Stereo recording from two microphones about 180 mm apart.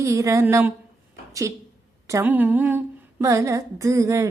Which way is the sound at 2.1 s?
15° right (ahead or behind).